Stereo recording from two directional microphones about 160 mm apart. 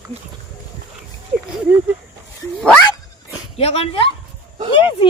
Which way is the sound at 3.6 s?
40° left (ahead or behind).